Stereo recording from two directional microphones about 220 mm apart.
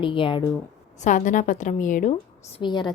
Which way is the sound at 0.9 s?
35° left (ahead or behind).